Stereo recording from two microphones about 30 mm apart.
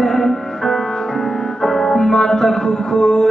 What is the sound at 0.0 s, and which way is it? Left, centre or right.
Music, centre.